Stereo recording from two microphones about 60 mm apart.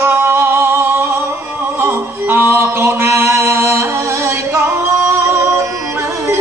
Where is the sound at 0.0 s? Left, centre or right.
Right.